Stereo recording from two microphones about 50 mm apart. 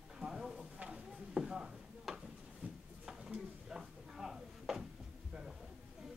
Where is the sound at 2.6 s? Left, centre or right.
Right.